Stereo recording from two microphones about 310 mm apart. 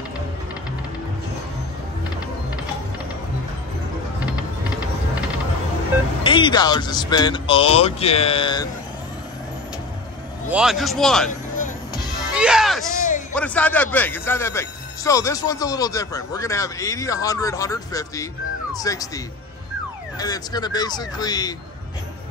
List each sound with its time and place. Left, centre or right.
6.2 s speech: centre
10.5 s a man's voice: centre
12.4 s speech: centre